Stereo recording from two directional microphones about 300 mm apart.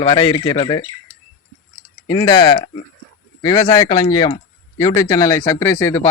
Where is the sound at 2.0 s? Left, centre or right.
Centre.